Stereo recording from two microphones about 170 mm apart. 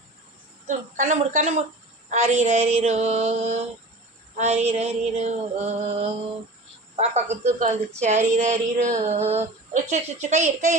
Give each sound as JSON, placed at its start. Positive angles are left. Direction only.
{"t": 0.7, "sound": "speech", "side_deg": -45}
{"t": 2.7, "sound": "a sound", "side_deg": -40}
{"t": 8.3, "sound": "speech", "side_deg": -45}